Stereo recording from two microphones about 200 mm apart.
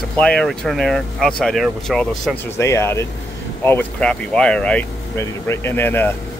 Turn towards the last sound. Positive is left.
turn(degrees=10)  # may be behind; listen again after turning